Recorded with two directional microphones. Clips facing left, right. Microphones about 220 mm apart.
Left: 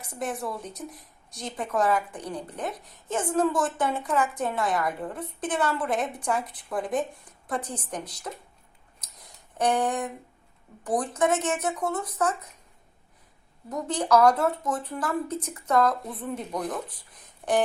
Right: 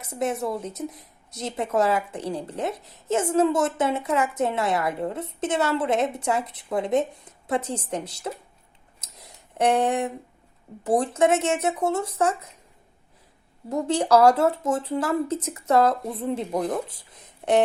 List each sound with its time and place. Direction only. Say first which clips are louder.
0.0 s a woman's voice: right 5 dB; 25° right (ahead or behind)
9.0 s a sound: right 4 dB; 25° right (ahead or behind)
9.6 s a woman's voice: right 4 dB; 25° right (ahead or behind)
13.7 s a woman's voice: right 4 dB; 25° right (ahead or behind)